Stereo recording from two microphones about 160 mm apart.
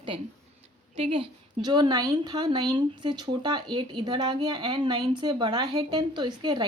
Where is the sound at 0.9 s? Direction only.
35° right (ahead or behind).